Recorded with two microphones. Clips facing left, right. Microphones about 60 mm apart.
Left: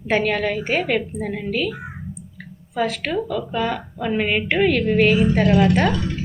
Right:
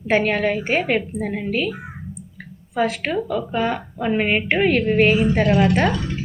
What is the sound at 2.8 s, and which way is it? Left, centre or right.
A woman's voice, centre.